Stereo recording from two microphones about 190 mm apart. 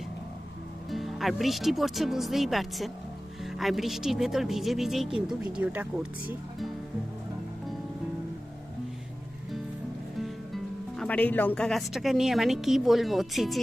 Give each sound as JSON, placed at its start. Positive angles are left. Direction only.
{"t": 0.9, "sound": "a woman's voice", "side_deg": 0}
{"t": 10.2, "sound": "speech", "side_deg": 0}